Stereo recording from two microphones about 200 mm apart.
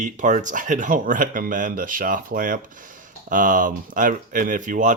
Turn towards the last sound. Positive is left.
turn(degrees=-40)  # may be behind; listen again after turning